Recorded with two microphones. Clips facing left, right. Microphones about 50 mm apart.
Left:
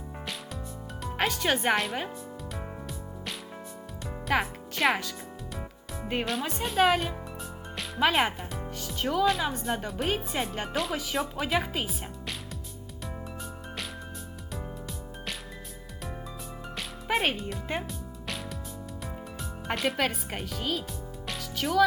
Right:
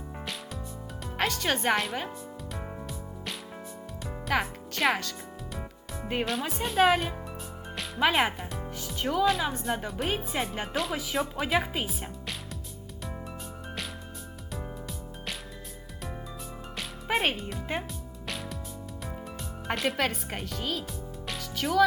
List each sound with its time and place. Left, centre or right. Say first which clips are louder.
1.0 s music: left 1 dB; centre
7.8 s speech: even; centre
14.5 s music: even; centre
16.7 s music: even; centre
19.6 s speech: even; centre